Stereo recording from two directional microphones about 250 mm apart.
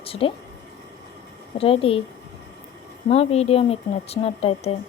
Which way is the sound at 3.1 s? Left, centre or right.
Left.